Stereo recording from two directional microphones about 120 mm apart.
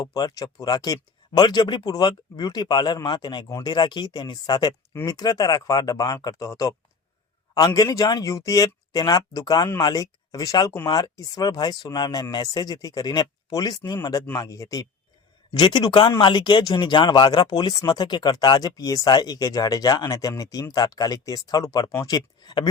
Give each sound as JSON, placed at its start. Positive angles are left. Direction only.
{"t": 0.0, "sound": "speech", "side_deg": 35}
{"t": 15.5, "sound": "speech", "side_deg": 40}